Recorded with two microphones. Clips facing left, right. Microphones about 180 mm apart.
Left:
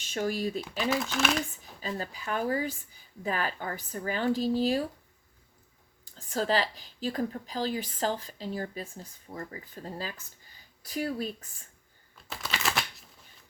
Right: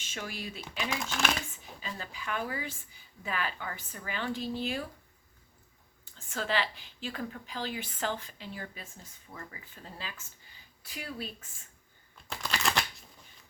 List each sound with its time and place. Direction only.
0.0 s a woman's voice: 40° left (ahead or behind)
0.9 s speech: centre (ahead or behind)
1.8 s a woman's voice: 40° left (ahead or behind)
6.1 s a woman's voice: 35° left (ahead or behind)
12.1 s a sound: centre (ahead or behind)